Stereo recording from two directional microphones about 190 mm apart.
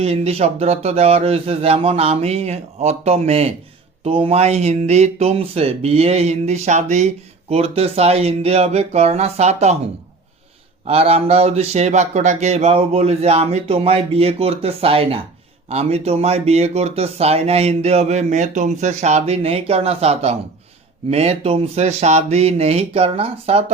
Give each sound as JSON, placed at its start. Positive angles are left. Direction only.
{"t": 0.0, "sound": "speech", "side_deg": -30}
{"t": 10.8, "sound": "speech", "side_deg": -30}